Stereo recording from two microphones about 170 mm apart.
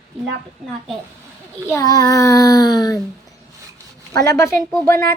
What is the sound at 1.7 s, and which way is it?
A child's voice, 20° left (ahead or behind).